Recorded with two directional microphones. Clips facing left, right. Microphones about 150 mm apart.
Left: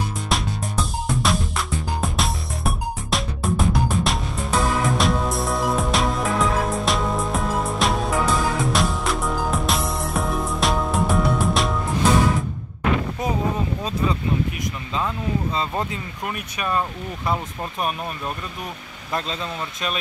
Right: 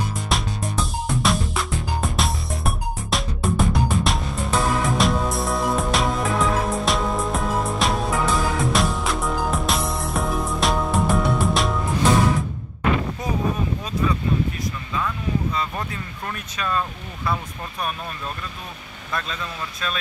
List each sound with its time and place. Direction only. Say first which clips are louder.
0.3 s music: left 1 dB; centre (ahead or behind)
14.0 s a sound: right 1 dB; 25° left (ahead or behind)
16.3 s speech: left 1 dB; 15° left (ahead or behind)